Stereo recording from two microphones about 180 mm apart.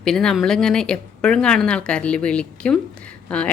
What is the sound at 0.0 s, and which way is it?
A woman's voice, 5° left (ahead or behind).